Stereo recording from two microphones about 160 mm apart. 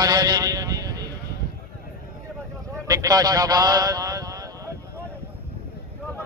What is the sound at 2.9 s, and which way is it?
Speech, 20° right (ahead or behind).